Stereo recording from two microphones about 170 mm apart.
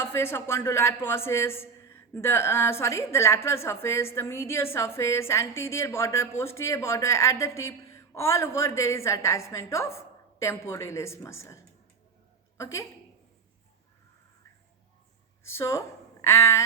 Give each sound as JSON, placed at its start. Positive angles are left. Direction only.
{"t": 0.0, "sound": "a man's voice", "side_deg": 15}
{"t": 15.4, "sound": "a man's voice", "side_deg": 15}